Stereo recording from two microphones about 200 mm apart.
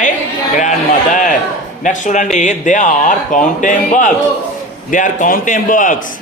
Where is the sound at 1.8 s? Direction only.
40° left (ahead or behind).